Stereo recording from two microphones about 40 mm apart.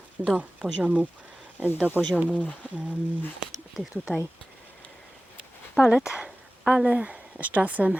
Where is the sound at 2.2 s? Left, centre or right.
Right.